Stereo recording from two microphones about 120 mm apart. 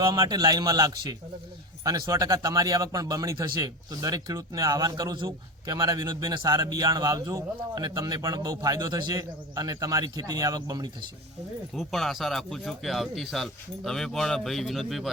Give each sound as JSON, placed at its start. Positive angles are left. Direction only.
{"t": 0.0, "sound": "a man's voice", "side_deg": -35}
{"t": 11.7, "sound": "speech", "side_deg": 5}